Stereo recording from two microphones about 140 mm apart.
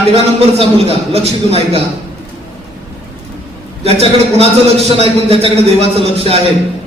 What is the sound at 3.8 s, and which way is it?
A man's voice, 45° right (ahead or behind).